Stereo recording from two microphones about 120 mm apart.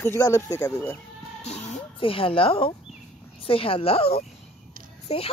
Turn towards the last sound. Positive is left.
turn(degrees=60)  # may be behind; listen again after turning